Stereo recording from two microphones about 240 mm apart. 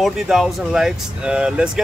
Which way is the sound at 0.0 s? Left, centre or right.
Centre.